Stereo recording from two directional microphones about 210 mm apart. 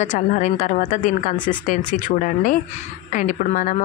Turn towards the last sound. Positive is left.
turn(degrees=35)  # may be behind; listen again after turning